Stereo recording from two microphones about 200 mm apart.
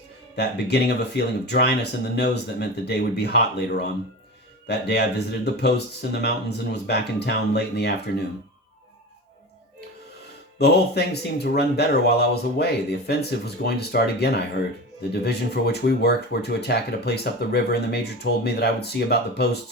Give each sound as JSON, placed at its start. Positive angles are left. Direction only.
{"t": 0.3, "sound": "speech", "side_deg": 55}
{"t": 10.6, "sound": "speech", "side_deg": 55}